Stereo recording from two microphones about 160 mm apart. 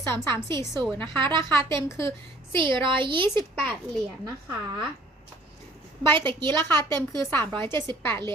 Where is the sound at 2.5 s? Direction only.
30° right (ahead or behind).